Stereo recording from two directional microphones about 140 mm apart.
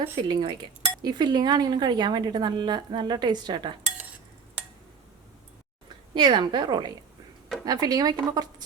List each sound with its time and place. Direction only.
0.0 s a woman's voice: 35° right (ahead or behind)
6.1 s a woman's voice: 35° right (ahead or behind)